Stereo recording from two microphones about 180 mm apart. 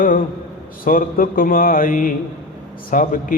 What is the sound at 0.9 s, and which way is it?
Mantra, 50° left (ahead or behind).